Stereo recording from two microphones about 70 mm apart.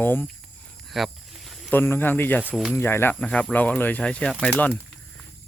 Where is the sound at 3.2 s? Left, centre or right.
Centre.